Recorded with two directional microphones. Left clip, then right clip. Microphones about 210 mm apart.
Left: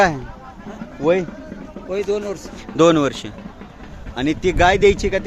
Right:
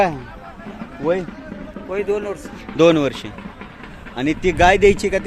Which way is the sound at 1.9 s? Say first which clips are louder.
Even; 60° left (ahead or behind).